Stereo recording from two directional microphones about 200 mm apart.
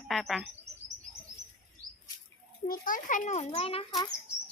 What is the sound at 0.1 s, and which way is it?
Bird, centre (ahead or behind).